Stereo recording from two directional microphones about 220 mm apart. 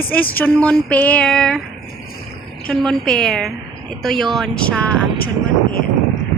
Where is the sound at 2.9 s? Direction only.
5° left (ahead or behind).